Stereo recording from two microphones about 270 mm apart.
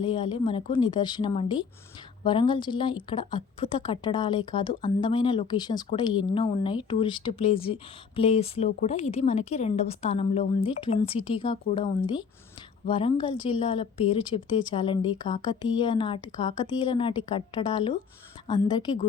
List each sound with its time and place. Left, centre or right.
0.0 s a woman's voice: centre